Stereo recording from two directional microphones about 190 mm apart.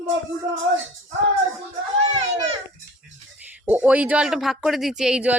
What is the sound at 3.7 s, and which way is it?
Speech, 10° right (ahead or behind).